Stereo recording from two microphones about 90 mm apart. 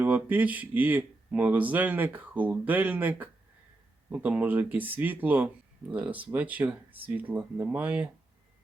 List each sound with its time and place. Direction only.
0.0 s speech: 20° right (ahead or behind)